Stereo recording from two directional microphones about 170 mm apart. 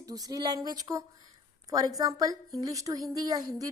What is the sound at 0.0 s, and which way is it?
A woman's voice, 20° right (ahead or behind).